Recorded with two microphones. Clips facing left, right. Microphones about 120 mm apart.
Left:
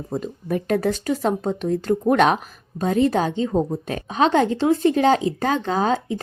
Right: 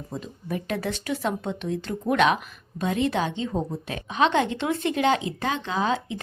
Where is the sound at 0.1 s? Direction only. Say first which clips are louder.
Left 7 dB; 50° left (ahead or behind).